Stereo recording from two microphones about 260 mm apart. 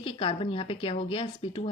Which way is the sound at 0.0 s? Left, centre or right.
Left.